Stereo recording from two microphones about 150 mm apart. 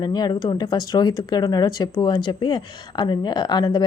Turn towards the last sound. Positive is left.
turn(degrees=30)  # may be behind; listen again after turning